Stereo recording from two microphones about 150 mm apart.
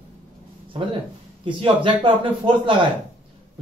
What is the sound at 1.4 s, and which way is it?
A man's voice, 35° right (ahead or behind).